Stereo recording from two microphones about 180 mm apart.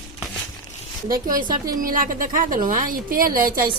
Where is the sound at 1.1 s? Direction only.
50° right (ahead or behind).